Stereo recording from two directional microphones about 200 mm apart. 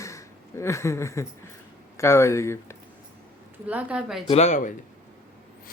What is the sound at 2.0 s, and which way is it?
Speech, 15° left (ahead or behind).